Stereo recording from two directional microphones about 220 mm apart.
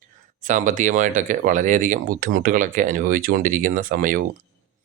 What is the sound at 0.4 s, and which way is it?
Speech, 35° right (ahead or behind).